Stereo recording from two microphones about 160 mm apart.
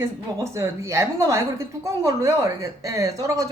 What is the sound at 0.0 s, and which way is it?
A woman's voice, 20° right (ahead or behind).